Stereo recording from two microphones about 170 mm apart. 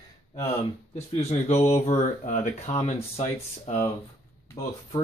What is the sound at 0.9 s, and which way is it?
Speech, 40° left (ahead or behind).